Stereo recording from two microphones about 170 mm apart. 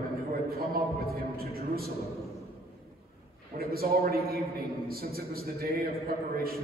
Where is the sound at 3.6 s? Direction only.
60° right (ahead or behind).